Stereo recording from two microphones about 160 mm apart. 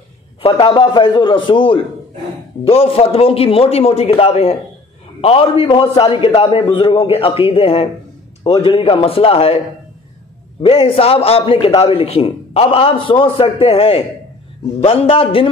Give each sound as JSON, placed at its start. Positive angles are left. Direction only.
{"t": 0.4, "sound": "a man's voice", "side_deg": 35}
{"t": 10.6, "sound": "a man's voice", "side_deg": 35}